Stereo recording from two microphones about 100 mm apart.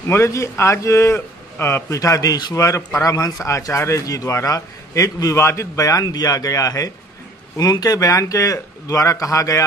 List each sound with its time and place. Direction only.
0.1 s a man's voice: 30° left (ahead or behind)